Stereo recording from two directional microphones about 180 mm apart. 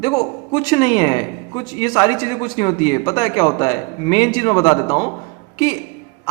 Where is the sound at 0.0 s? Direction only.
20° left (ahead or behind).